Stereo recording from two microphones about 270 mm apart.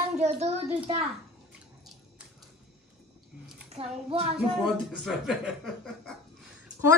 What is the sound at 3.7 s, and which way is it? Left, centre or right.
Speech, right.